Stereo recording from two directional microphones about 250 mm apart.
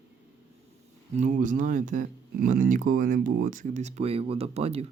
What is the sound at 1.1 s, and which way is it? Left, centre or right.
Speech, right.